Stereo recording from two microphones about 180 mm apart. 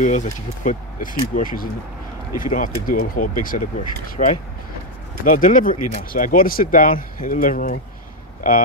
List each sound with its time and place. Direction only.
0.0 s speech: 45° left (ahead or behind)